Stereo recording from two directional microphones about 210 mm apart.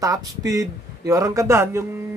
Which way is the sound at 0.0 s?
15° right (ahead or behind).